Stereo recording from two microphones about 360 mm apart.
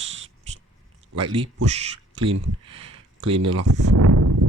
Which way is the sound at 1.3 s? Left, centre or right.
Centre.